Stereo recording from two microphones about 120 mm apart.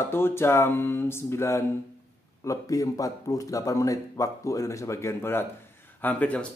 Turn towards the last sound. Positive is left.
turn(degrees=10)  # may be behind; listen again after turning